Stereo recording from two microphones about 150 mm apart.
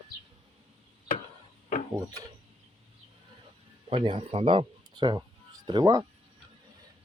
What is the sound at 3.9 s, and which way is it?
Speech, 35° right (ahead or behind).